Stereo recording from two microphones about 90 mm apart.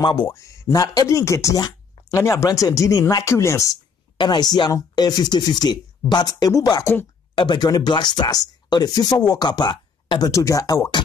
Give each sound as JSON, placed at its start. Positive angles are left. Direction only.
{"t": 0.0, "sound": "speech", "side_deg": 60}
{"t": 0.3, "sound": "speech", "side_deg": 35}
{"t": 4.2, "sound": "speech", "side_deg": 55}
{"t": 7.3, "sound": "speech", "side_deg": 60}
{"t": 10.3, "sound": "speech", "side_deg": 35}